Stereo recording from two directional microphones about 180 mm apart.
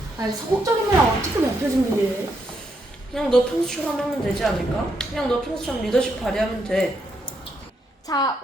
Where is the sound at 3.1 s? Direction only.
5° left (ahead or behind).